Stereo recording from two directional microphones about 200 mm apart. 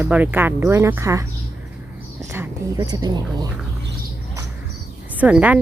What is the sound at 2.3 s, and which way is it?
Speech, 15° right (ahead or behind).